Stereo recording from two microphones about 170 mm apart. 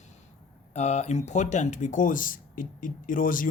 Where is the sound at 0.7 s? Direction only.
40° left (ahead or behind).